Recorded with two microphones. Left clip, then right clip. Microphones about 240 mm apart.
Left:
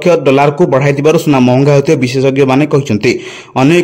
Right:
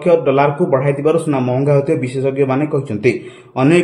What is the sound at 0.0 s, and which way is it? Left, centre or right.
A man's voice, left.